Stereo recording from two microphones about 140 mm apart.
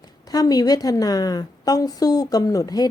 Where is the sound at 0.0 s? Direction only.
25° left (ahead or behind).